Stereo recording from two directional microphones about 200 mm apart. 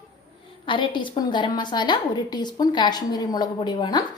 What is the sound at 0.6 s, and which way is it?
A woman's voice, 25° left (ahead or behind).